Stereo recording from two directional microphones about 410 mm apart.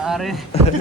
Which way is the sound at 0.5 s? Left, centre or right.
Centre.